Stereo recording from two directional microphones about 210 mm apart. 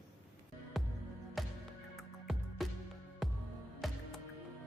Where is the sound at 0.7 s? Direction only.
Centre (ahead or behind).